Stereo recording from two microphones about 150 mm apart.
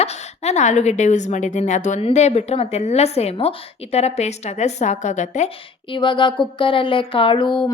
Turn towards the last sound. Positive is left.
turn(degrees=35)  # may be behind; listen again after turning